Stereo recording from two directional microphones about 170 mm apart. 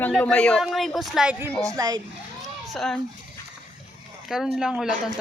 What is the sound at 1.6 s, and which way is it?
Speech, 25° right (ahead or behind).